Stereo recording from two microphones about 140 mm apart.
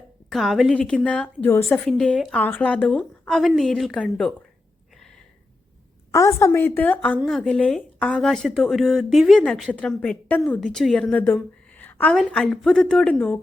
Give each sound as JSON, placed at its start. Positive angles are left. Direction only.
{"t": 0.3, "sound": "a woman's voice", "side_deg": 0}
{"t": 6.1, "sound": "a woman's voice", "side_deg": 20}
{"t": 11.8, "sound": "a sound", "side_deg": 10}
{"t": 12.1, "sound": "a woman's voice", "side_deg": 5}